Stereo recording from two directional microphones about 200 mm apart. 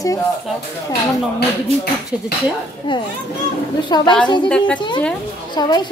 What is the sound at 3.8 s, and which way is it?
A child's voice, 20° left (ahead or behind).